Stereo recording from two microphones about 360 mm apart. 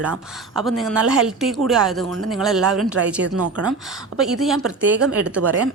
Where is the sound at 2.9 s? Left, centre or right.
Right.